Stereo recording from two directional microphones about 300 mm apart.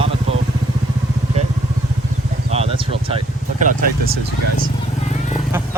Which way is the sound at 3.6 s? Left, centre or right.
Right.